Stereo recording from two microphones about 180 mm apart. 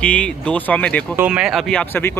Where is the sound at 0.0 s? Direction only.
5° left (ahead or behind).